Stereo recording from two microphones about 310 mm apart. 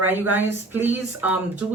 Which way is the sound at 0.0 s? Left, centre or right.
Centre.